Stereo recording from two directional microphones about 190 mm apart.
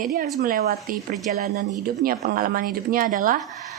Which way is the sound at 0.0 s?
50° right (ahead or behind).